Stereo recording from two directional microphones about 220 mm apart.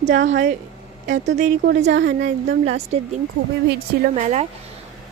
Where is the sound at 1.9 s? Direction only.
50° right (ahead or behind).